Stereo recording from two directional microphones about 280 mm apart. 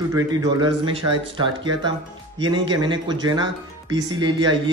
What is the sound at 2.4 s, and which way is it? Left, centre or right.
Speech, centre.